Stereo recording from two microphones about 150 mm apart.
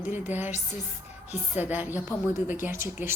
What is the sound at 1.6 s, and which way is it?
A woman's voice, 10° right (ahead or behind).